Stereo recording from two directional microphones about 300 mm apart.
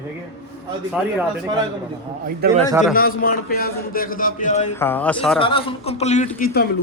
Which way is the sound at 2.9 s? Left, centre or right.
Left.